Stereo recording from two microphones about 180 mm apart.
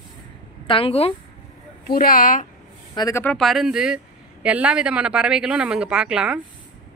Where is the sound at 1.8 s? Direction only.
55° left (ahead or behind).